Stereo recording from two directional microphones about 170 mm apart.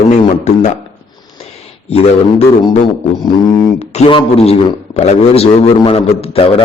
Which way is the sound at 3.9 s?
35° left (ahead or behind).